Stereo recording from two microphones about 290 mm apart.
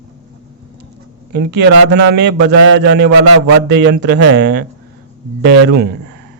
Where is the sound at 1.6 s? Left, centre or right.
Right.